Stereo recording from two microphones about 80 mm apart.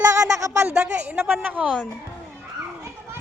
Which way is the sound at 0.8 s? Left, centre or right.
Centre.